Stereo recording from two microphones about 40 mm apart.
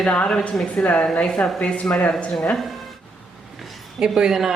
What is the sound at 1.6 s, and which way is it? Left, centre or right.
Speech, left.